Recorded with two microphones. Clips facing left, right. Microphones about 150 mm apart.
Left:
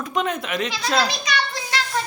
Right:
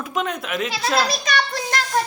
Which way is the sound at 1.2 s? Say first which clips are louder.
Right 2 dB; 45° right (ahead or behind).